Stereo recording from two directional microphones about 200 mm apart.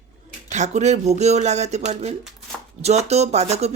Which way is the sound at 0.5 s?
35° right (ahead or behind).